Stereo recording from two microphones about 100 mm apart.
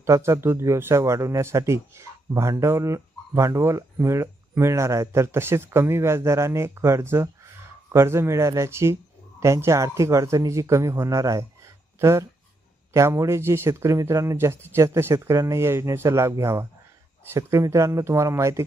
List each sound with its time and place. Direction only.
0.0 s speech: 30° right (ahead or behind)